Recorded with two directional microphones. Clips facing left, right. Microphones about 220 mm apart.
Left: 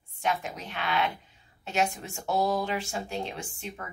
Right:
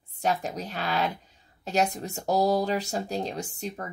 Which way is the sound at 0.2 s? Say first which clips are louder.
Right 3 dB; 40° right (ahead or behind).